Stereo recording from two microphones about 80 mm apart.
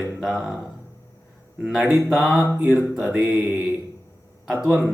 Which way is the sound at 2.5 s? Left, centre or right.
Centre.